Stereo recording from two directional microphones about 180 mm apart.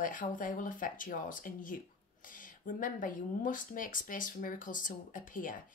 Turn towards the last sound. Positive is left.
turn(degrees=50)  # may be behind; listen again after turning